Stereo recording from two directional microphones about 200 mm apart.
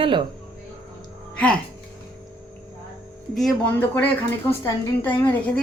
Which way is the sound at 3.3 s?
Centre (ahead or behind).